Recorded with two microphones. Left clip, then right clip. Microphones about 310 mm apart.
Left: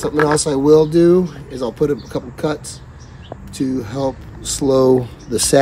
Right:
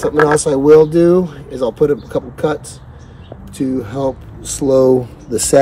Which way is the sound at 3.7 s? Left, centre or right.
Centre.